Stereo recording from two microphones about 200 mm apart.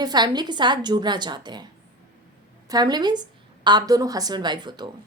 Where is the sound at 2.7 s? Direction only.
20° right (ahead or behind).